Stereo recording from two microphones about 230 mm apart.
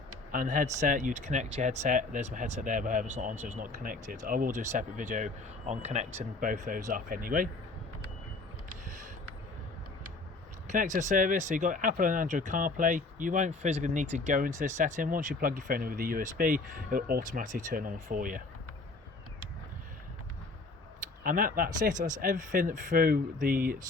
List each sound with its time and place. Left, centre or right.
0.3 s speech: right
10.7 s speech: right
21.2 s speech: right